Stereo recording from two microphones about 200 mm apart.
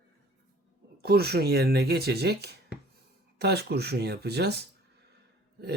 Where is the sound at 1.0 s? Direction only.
50° right (ahead or behind).